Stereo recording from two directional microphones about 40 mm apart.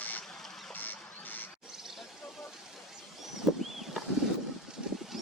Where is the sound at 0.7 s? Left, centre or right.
Left.